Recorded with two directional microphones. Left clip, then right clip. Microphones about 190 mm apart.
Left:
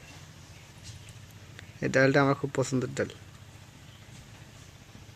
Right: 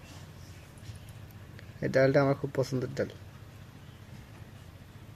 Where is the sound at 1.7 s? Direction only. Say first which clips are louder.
Left 1 dB; 15° left (ahead or behind).